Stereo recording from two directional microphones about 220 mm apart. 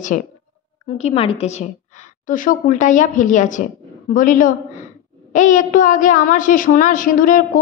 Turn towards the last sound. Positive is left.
turn(degrees=35)  # may be behind; listen again after turning